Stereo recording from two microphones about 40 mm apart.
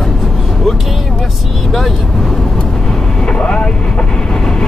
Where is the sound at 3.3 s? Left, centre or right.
Left.